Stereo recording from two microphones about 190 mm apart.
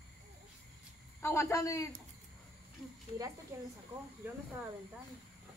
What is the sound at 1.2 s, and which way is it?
Speech, 15° left (ahead or behind).